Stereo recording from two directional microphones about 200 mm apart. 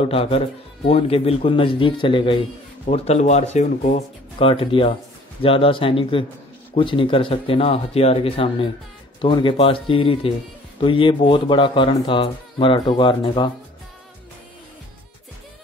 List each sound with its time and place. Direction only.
0.0 s speech: 30° left (ahead or behind)